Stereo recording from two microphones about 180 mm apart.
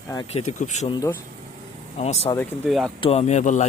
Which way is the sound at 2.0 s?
35° left (ahead or behind).